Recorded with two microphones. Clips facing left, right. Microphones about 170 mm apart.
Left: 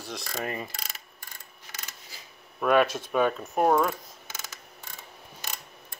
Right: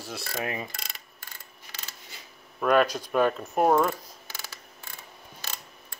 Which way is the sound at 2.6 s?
Centre (ahead or behind).